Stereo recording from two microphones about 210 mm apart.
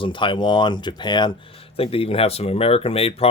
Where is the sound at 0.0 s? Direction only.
25° left (ahead or behind).